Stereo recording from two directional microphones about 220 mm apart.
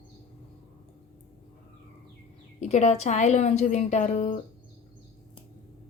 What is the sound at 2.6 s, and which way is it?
A woman's voice, 30° left (ahead or behind).